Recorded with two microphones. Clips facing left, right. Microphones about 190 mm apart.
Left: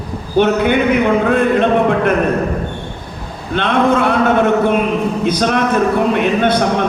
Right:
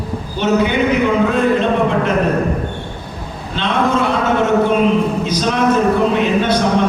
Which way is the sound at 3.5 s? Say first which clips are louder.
Left 3 dB; 55° left (ahead or behind).